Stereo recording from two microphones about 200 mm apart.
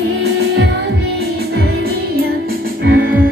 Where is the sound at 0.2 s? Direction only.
55° right (ahead or behind).